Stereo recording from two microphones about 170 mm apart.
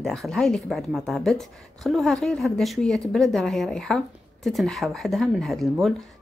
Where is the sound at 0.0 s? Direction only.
Centre (ahead or behind).